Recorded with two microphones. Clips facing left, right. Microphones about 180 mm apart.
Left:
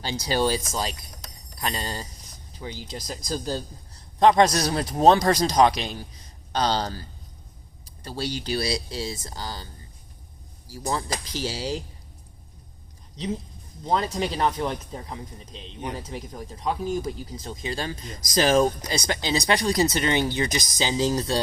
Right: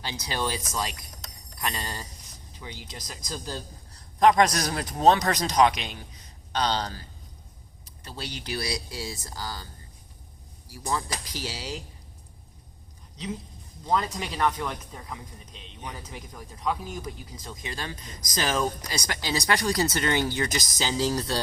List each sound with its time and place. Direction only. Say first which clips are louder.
0.0 s a man's voice: left 7 dB; 30° left (ahead or behind)
8.0 s speech: left 7 dB; 30° left (ahead or behind)
10.7 s speech: left 2 dB; 25° left (ahead or behind)
13.8 s a man's voice: left 3 dB; 30° left (ahead or behind)